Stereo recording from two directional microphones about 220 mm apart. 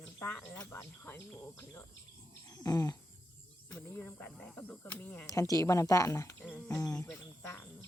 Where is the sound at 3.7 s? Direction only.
10° left (ahead or behind).